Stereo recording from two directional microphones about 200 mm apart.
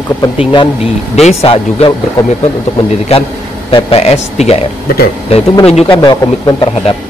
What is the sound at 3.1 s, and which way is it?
A man's voice, 30° left (ahead or behind).